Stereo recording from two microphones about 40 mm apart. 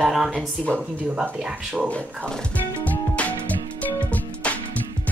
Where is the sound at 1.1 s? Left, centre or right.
Right.